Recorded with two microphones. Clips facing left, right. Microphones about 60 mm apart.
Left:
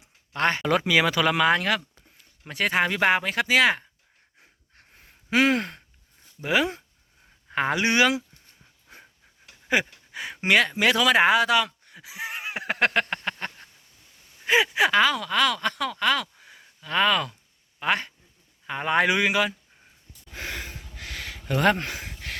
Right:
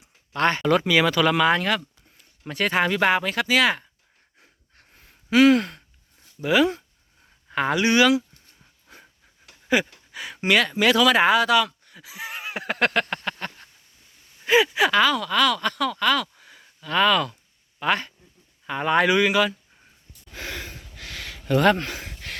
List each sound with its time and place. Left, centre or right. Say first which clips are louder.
0.3 s speech: right 3 dB; centre
4.4 s sigh: even; centre
6.4 s speech: right 4 dB; left
8.9 s pant: even; centre
9.7 s speech: right 1 dB; left
10.1 s a sound: left 1 dB; left
10.4 s speech: right 1 dB; left
14.4 s a sound: right 2 dB; left
17.7 s speech: right 2 dB; centre
20.3 s a sound: even; centre